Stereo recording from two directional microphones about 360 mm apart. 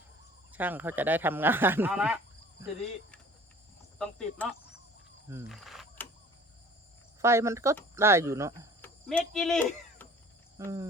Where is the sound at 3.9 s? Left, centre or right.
Centre.